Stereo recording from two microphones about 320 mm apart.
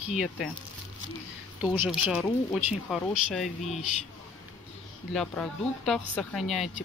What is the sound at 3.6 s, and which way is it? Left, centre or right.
Speech, left.